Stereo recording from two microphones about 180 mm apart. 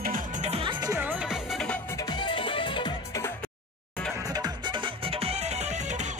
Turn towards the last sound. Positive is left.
turn(degrees=-40)  # may be behind; listen again after turning